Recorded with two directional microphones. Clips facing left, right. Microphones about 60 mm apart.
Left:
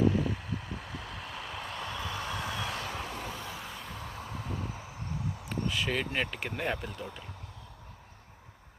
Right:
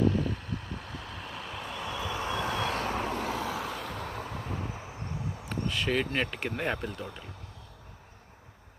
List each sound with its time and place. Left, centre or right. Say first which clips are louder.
0.0 s vehicle: even; centre
2.0 s vehicle: right 6 dB; right
2.4 s vehicle: right 5 dB; right
3.2 s vehicle: right 7 dB; right
4.6 s vehicle: right 2 dB; right
5.5 s speech: right 2 dB; centre